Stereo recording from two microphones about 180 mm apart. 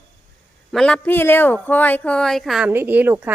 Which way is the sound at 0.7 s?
5° left (ahead or behind).